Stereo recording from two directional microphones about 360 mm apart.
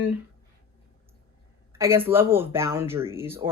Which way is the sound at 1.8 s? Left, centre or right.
Centre.